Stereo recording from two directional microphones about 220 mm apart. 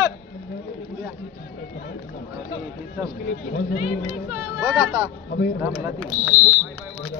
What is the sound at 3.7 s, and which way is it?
Speech, 30° left (ahead or behind).